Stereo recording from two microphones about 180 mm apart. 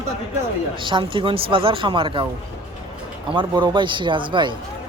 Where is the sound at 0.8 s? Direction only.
25° right (ahead or behind).